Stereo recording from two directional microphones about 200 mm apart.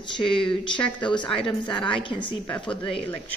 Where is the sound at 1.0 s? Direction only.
25° left (ahead or behind).